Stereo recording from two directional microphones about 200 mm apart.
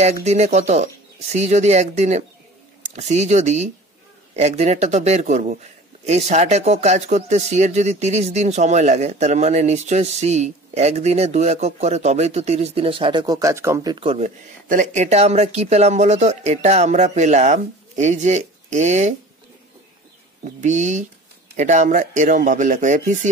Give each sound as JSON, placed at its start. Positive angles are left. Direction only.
{"t": 0.0, "sound": "speech", "side_deg": -35}
{"t": 20.4, "sound": "speech", "side_deg": -35}